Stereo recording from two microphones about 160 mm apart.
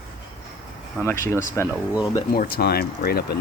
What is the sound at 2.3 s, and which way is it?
Speech, 70° left (ahead or behind).